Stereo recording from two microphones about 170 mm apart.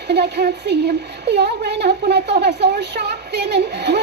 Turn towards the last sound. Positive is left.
turn(degrees=-75)  # may be behind; listen again after turning